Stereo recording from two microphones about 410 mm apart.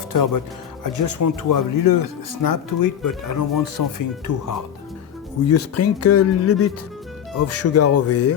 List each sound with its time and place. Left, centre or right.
0.1 s speech: left
5.5 s speech: left